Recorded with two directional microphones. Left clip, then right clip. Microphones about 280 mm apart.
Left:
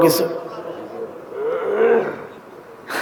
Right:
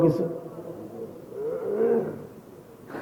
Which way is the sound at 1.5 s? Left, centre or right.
Centre.